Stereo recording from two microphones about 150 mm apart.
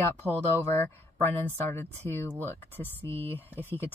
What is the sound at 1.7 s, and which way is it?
Speech, 15° left (ahead or behind).